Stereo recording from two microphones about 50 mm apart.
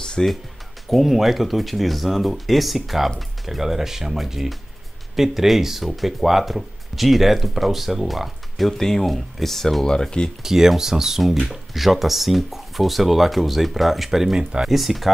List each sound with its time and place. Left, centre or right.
0.0 s music: centre
0.8 s speech: centre
3.2 s chopping: centre
5.1 s speech: centre
10.4 s chopping: centre
11.4 s speech: centre
14.7 s speech: centre